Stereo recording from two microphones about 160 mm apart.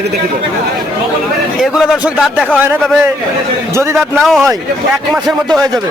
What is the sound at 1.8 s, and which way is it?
Speech, 5° right (ahead or behind).